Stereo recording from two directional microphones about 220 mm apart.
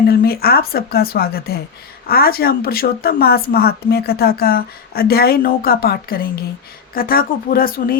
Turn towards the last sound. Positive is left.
turn(degrees=40)  # may be behind; listen again after turning